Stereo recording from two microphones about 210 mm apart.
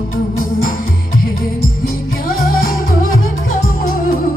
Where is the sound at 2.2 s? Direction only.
45° left (ahead or behind).